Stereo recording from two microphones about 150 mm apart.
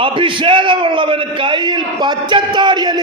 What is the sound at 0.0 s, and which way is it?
Speech, 35° right (ahead or behind).